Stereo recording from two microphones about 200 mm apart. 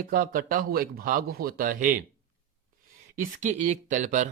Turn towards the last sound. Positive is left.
turn(degrees=-35)  # may be behind; listen again after turning